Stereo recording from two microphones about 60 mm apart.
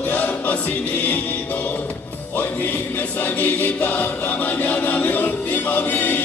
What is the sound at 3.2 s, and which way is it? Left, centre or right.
Choir, left.